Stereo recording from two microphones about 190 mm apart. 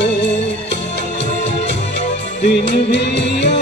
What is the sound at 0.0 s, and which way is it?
Music, 65° left (ahead or behind).